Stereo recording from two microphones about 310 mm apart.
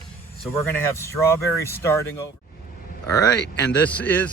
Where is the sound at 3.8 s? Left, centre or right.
Centre.